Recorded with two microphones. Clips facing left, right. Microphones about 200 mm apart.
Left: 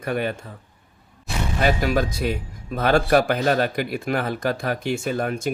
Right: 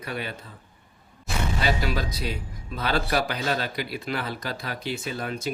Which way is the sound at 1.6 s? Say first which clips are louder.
Left 7 dB; 50° left (ahead or behind).